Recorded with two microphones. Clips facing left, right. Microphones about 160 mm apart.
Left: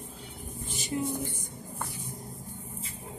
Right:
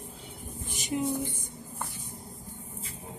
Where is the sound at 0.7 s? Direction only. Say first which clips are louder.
Right 2 dB; 15° right (ahead or behind).